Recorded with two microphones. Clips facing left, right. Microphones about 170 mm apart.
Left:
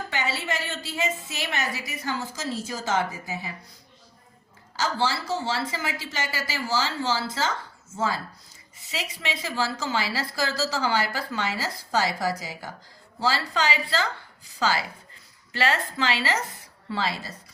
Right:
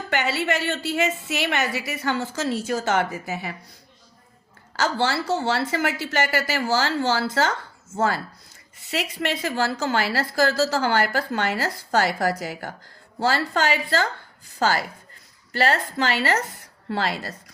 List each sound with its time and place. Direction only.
0.1 s a woman's voice: 70° right (ahead or behind)
4.8 s a woman's voice: 65° right (ahead or behind)